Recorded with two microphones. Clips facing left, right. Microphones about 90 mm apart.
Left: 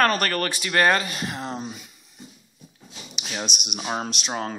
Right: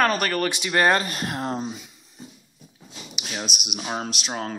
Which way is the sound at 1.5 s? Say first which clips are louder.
Right 3 dB; centre (ahead or behind).